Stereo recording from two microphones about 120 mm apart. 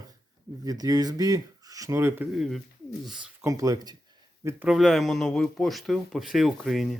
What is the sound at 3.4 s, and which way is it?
Speech, 30° right (ahead or behind).